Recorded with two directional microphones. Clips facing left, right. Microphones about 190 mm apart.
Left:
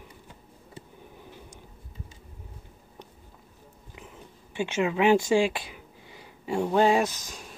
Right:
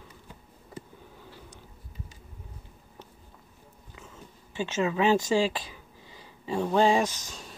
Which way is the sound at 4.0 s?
15° left (ahead or behind).